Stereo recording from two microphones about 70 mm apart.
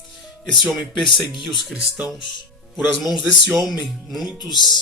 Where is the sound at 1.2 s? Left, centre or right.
Centre.